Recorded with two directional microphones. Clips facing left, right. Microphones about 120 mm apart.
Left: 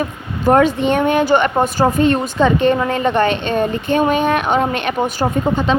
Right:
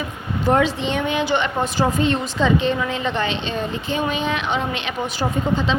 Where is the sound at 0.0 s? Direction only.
50° left (ahead or behind).